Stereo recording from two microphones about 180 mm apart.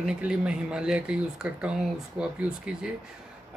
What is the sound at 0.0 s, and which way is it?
Speech, 5° right (ahead or behind).